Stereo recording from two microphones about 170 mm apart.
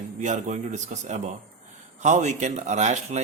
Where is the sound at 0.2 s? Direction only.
45° right (ahead or behind).